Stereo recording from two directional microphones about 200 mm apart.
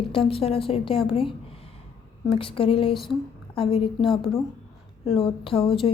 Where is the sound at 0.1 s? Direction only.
25° left (ahead or behind).